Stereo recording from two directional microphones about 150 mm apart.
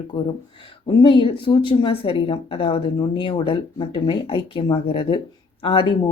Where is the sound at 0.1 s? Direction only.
35° left (ahead or behind).